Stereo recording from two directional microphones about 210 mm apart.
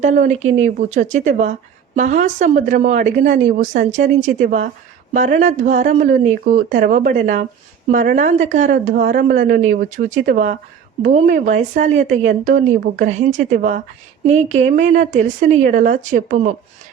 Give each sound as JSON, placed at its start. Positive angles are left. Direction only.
{"t": 0.0, "sound": "a woman's voice", "side_deg": -35}